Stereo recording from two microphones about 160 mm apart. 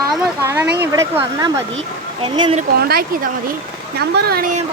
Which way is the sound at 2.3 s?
35° right (ahead or behind).